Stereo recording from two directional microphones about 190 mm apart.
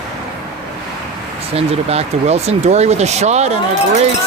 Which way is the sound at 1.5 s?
35° right (ahead or behind).